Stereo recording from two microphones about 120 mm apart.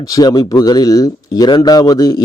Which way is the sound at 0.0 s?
30° left (ahead or behind).